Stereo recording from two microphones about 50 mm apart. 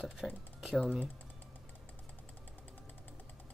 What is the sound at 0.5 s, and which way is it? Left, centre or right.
Typing, centre.